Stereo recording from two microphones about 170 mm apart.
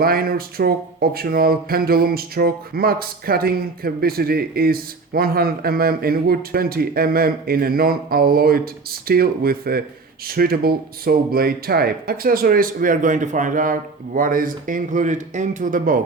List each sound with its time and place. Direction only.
0.0 s speech: 60° right (ahead or behind)